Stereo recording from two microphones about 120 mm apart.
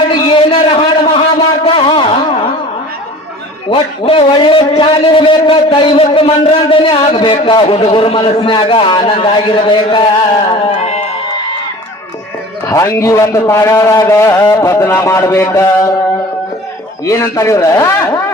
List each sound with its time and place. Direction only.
0.1 s a sound: 45° left (ahead or behind)
3.7 s a man's voice: 45° left (ahead or behind)
10.5 s music: 55° left (ahead or behind)
12.6 s a man's voice: 25° left (ahead or behind)
17.1 s a man's voice: 25° left (ahead or behind)